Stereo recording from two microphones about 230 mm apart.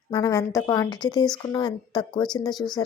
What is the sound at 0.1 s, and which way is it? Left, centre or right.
A woman's voice, centre.